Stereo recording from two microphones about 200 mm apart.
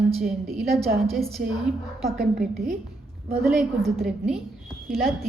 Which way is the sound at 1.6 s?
Centre (ahead or behind).